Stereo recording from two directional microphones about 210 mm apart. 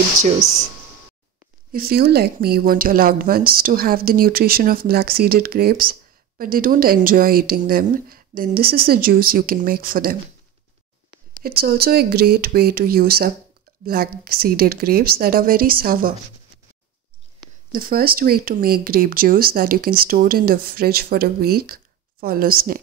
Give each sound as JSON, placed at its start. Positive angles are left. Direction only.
{"t": 1.7, "sound": "speech", "side_deg": -45}
{"t": 11.3, "sound": "speech", "side_deg": -45}
{"t": 17.7, "sound": "speech", "side_deg": -45}